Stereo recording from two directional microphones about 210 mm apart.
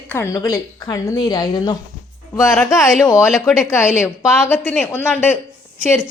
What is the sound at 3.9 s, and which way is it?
A woman's voice, 10° left (ahead or behind).